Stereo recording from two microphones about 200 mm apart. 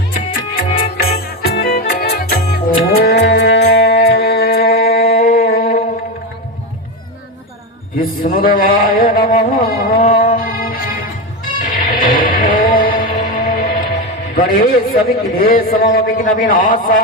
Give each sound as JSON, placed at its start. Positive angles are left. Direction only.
{"t": 0.1, "sound": "music", "side_deg": 45}
{"t": 7.9, "sound": "music", "side_deg": 45}
{"t": 14.3, "sound": "a man's voice", "side_deg": 45}